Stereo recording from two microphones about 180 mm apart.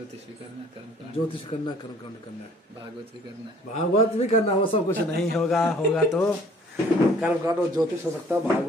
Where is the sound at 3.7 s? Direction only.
35° left (ahead or behind).